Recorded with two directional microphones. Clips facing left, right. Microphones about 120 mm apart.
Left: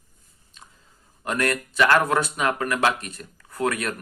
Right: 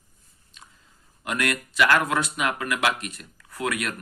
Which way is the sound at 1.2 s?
35° left (ahead or behind).